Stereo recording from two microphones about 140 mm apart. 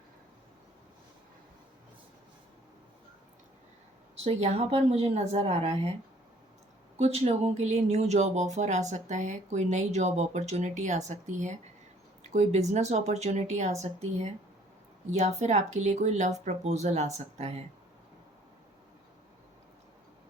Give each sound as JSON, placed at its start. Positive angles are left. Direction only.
{"t": 4.2, "sound": "speech", "side_deg": -50}
{"t": 7.0, "sound": "speech", "side_deg": -50}